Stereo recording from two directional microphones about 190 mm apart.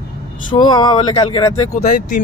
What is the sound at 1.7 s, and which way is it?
Speech, 40° left (ahead or behind).